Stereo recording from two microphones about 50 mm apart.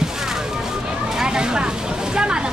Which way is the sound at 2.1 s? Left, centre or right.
Centre.